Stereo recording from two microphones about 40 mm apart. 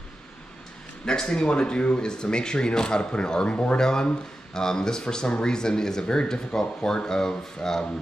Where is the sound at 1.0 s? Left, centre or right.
Centre.